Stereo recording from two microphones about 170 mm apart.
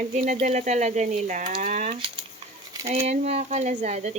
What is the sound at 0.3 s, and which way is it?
Speech, 45° right (ahead or behind).